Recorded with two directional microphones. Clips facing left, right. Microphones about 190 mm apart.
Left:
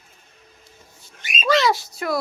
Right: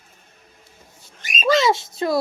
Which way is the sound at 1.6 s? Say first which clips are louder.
Right 2 dB; 25° right (ahead or behind).